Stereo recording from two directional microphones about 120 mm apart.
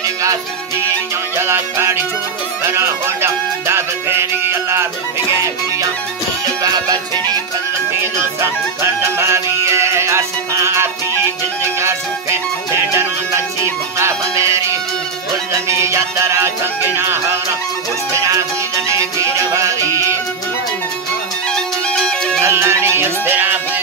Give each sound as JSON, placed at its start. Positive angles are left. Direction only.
{"t": 1.4, "sound": "music", "side_deg": -20}
{"t": 6.6, "sound": "music", "side_deg": -35}
{"t": 8.0, "sound": "music", "side_deg": -20}
{"t": 13.9, "sound": "music", "side_deg": -25}
{"t": 21.5, "sound": "music", "side_deg": 5}
{"t": 22.4, "sound": "music", "side_deg": -20}